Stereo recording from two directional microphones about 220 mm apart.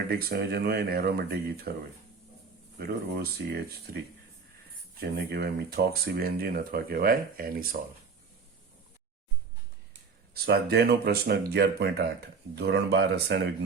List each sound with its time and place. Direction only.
0.1 s speech: 45° right (ahead or behind)
2.7 s speech: 45° right (ahead or behind)
4.9 s speech: 45° right (ahead or behind)
10.3 s speech: 45° right (ahead or behind)